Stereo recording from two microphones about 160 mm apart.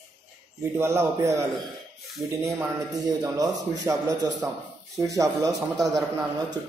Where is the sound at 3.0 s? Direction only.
25° right (ahead or behind).